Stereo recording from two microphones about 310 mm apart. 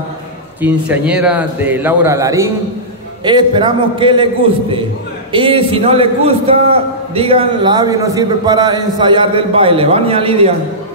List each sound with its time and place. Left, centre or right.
0.6 s a man's voice: centre